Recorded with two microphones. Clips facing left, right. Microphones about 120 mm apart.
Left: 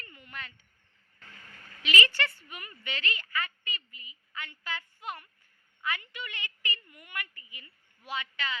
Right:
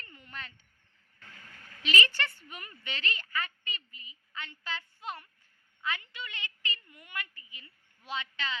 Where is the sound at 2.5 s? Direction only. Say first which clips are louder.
Left 2 dB; 35° right (ahead or behind).